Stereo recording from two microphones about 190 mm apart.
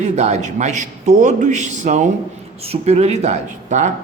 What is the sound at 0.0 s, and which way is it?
A man's voice, 35° right (ahead or behind).